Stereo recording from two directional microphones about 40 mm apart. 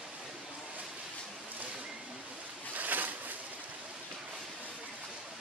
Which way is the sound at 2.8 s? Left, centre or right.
Right.